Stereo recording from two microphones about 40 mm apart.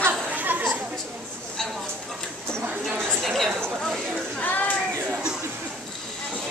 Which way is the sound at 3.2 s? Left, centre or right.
Centre.